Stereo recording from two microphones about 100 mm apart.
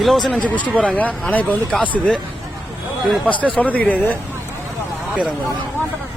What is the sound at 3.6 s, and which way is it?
Speech, 15° left (ahead or behind).